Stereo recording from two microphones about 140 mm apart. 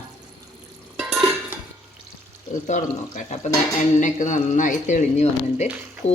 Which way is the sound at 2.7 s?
55° left (ahead or behind).